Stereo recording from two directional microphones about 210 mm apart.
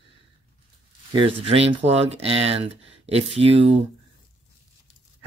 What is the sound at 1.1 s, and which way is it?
Speech, 25° right (ahead or behind).